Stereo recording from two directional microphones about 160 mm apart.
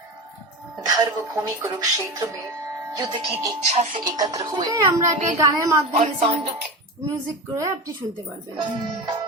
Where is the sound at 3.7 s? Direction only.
45° right (ahead or behind).